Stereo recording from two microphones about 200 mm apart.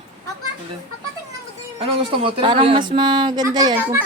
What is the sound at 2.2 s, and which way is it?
A woman's voice, 25° right (ahead or behind).